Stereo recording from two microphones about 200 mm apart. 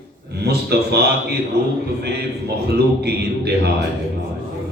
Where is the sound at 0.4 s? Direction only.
55° right (ahead or behind).